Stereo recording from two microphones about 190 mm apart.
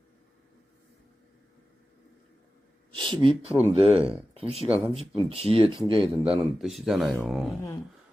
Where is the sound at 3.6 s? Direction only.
30° right (ahead or behind).